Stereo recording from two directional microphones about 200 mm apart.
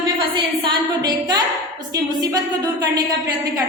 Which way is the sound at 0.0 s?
25° right (ahead or behind).